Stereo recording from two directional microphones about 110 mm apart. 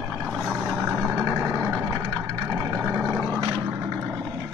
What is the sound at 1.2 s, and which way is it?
Vehicle, 25° right (ahead or behind).